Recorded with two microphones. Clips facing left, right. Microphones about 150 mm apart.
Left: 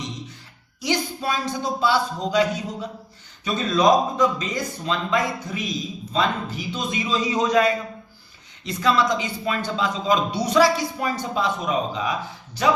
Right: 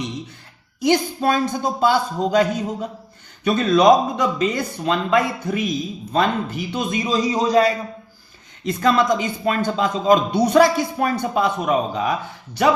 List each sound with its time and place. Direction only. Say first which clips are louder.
0.8 s a man's voice: right 7 dB; 50° right (ahead or behind)
3.4 s a man's voice: right 5 dB; 60° right (ahead or behind); by 7.7 s 35° right (ahead or behind)
8.6 s a man's voice: right 3 dB; 50° right (ahead or behind)